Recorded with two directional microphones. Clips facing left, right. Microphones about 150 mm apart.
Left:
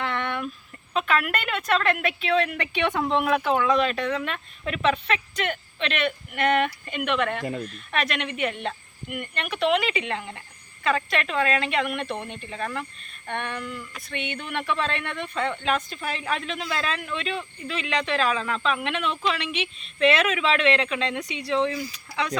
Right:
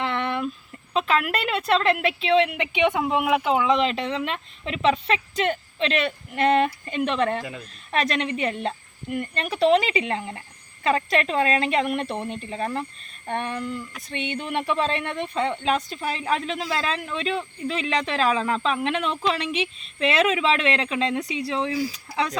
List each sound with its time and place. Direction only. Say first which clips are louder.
0.0 s a sound: right 3 dB; 30° right (ahead or behind)
0.9 s a woman's voice: right 2 dB; 30° right (ahead or behind)
7.4 s speech: left 6 dB; 40° left (ahead or behind)
7.7 s speech: right 3 dB; 35° right (ahead or behind)